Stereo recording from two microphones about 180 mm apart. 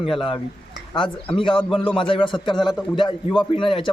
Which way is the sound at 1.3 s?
30° left (ahead or behind).